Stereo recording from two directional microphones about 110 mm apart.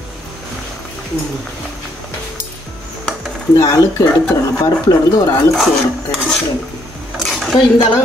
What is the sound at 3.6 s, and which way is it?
Speech, 30° left (ahead or behind).